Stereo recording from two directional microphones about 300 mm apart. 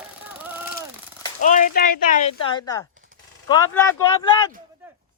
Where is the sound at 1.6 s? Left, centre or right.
Left.